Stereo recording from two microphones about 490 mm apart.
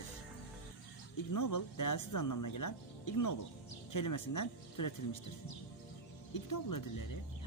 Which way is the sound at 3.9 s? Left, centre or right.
Left.